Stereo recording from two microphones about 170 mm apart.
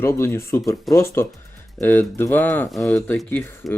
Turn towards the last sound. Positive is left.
turn(degrees=0)  # may be behind; listen again after turning